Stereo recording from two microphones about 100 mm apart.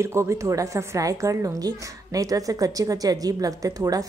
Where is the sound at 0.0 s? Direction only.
30° right (ahead or behind).